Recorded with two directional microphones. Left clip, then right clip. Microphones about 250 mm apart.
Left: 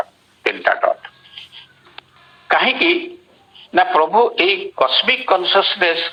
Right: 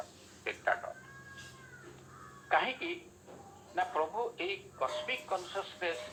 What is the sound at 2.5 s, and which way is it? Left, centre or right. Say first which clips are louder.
Speech: left 18 dB; left.